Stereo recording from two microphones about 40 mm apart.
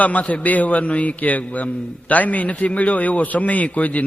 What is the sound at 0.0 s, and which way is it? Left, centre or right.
A man's voice, left.